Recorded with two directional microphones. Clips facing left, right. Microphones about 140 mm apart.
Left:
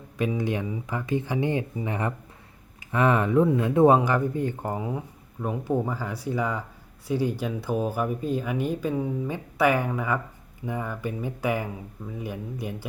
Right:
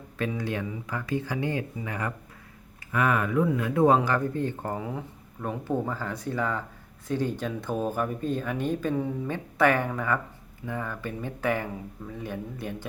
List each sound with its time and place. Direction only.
0.2 s speech: 15° left (ahead or behind)